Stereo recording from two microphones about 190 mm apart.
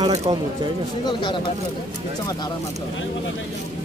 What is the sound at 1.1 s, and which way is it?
Speech, 25° left (ahead or behind).